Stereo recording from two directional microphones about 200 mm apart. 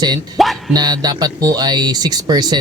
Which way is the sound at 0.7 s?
20° right (ahead or behind).